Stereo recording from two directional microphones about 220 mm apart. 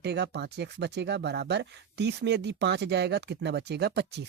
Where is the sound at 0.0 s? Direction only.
50° right (ahead or behind).